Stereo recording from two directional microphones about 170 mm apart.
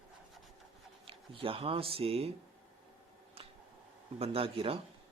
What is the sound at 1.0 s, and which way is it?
Speech, 30° right (ahead or behind).